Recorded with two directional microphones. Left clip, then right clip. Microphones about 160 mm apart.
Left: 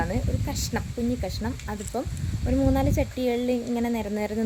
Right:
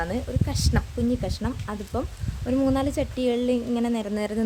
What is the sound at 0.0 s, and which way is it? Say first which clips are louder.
A woman's voice: right 1 dB; 15° right (ahead or behind).